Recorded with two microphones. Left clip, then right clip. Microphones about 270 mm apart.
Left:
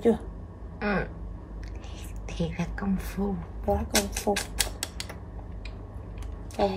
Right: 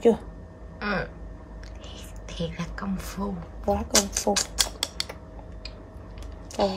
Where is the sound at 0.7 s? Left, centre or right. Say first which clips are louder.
Even; centre.